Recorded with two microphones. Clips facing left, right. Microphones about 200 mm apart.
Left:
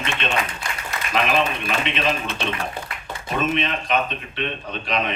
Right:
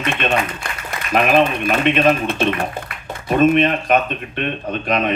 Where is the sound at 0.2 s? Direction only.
50° right (ahead or behind).